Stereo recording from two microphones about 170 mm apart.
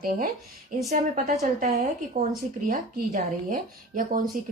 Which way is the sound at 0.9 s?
45° right (ahead or behind).